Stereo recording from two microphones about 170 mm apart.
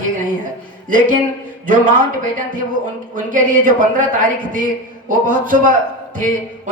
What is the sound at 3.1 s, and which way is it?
Speech, 50° right (ahead or behind).